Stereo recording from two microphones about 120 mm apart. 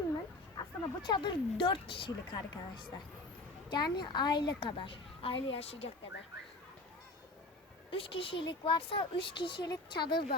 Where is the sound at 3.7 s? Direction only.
40° left (ahead or behind); by 5.9 s 55° left (ahead or behind).